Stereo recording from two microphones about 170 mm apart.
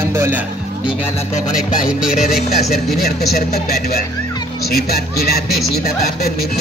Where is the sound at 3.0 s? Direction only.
60° left (ahead or behind).